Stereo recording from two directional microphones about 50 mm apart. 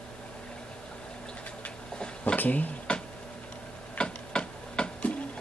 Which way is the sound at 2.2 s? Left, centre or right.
Left.